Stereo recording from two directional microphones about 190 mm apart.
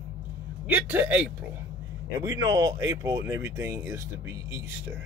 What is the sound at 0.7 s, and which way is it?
Speech, 10° right (ahead or behind).